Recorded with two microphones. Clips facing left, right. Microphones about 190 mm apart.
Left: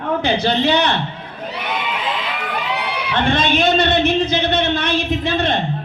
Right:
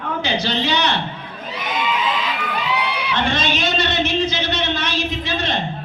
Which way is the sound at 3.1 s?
55° left (ahead or behind).